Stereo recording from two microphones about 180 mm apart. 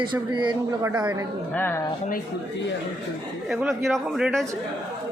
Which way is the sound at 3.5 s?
Centre (ahead or behind).